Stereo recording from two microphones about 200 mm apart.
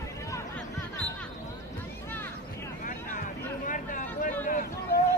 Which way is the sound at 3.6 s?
40° left (ahead or behind).